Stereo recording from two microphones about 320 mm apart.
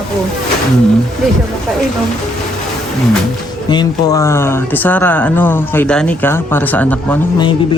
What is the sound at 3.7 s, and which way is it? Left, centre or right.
Speech, centre.